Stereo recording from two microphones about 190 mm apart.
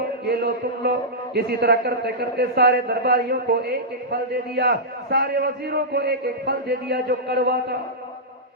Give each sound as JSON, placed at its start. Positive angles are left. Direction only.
{"t": 0.3, "sound": "a man's voice", "side_deg": -55}